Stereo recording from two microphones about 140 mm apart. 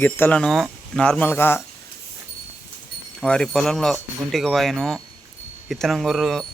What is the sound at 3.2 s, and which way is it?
Speech, 5° left (ahead or behind).